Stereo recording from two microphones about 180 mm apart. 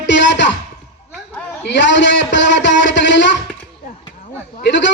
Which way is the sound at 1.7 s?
90° left.